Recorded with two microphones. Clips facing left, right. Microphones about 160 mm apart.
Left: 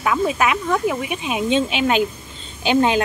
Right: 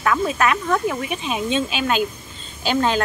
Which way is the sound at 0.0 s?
10° left (ahead or behind).